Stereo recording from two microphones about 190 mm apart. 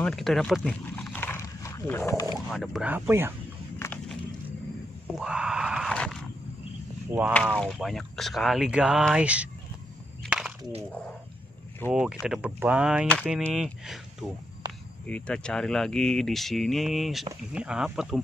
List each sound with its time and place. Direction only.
0.0 s dog: centre (ahead or behind)
2.3 s speech: centre (ahead or behind)
3.8 s a sound: 15° left (ahead or behind)
5.1 s a sound: 5° right (ahead or behind)
7.1 s speech: 10° right (ahead or behind)
7.6 s speech: centre (ahead or behind)
10.2 s chop: centre (ahead or behind)
10.6 s speech: 30° right (ahead or behind)
10.9 s speech: 5° left (ahead or behind)
15.0 s speech: 5° left (ahead or behind)